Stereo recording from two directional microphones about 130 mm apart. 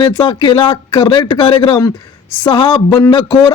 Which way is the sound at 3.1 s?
40° left (ahead or behind).